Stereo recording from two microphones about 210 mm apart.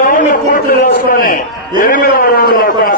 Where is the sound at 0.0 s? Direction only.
40° left (ahead or behind).